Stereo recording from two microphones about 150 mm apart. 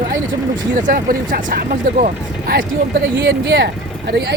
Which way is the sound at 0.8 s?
65° right (ahead or behind).